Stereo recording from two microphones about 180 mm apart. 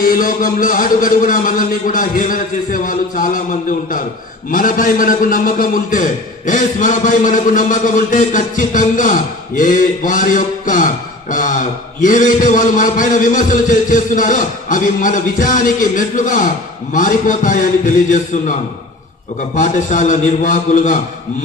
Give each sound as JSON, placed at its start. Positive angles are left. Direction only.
{"t": 0.0, "sound": "a man's voice", "side_deg": 50}
{"t": 19.5, "sound": "a man's voice", "side_deg": 45}